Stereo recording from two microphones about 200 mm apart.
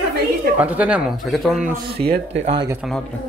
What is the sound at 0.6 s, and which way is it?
A man's voice, 5° right (ahead or behind).